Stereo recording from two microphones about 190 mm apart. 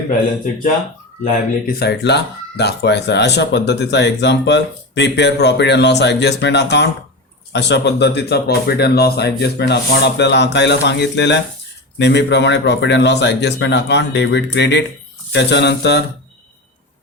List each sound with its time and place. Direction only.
1.2 s speech: 50° left (ahead or behind)